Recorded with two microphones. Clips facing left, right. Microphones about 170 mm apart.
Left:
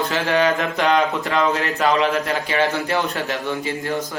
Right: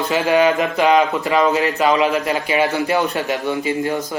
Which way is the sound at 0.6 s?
Centre (ahead or behind).